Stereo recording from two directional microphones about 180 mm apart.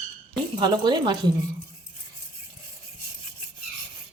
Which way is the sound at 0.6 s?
25° right (ahead or behind).